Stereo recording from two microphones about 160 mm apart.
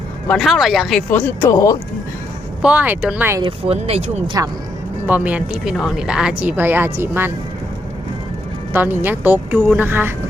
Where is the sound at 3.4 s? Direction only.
40° right (ahead or behind).